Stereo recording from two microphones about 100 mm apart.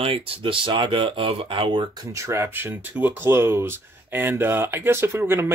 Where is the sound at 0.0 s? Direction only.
65° right (ahead or behind).